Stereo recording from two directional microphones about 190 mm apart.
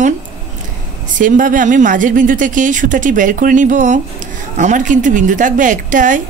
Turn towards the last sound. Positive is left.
turn(degrees=-40)  # may be behind; listen again after turning